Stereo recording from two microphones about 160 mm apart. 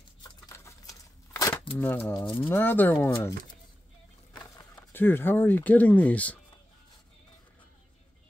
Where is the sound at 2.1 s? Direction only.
20° left (ahead or behind).